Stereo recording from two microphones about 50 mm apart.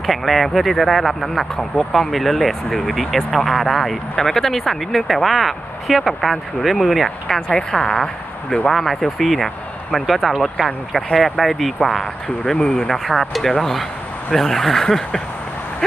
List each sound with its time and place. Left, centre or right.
0.0 s speech: centre
7.5 s speech: centre
8.6 s speech: centre
12.5 s speech: centre
12.9 s speech: centre